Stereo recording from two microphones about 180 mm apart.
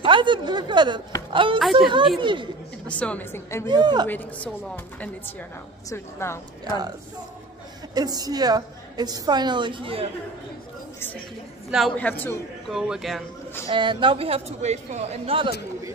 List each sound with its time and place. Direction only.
0.0 s a woman's voice: 25° right (ahead or behind)
1.6 s speech: centre (ahead or behind)
2.1 s a woman's voice: 25° right (ahead or behind)
2.9 s a woman's voice: 5° left (ahead or behind)
3.6 s a woman's voice: 25° right (ahead or behind)
4.1 s a woman's voice: 10° left (ahead or behind)
7.9 s a woman's voice: 20° right (ahead or behind)
11.7 s a woman's voice: 5° left (ahead or behind)
12.7 s speech: centre (ahead or behind)
13.7 s speech: 25° right (ahead or behind)